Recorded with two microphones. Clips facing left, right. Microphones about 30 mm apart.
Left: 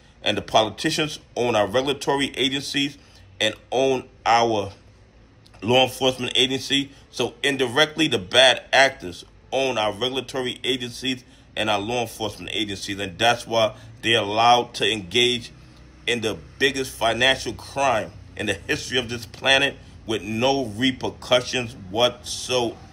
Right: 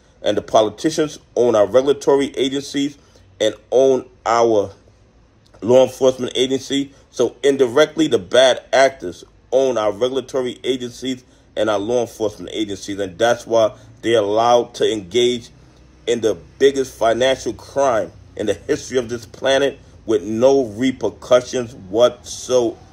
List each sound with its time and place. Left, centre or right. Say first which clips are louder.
0.2 s a man's voice: right 5 dB; left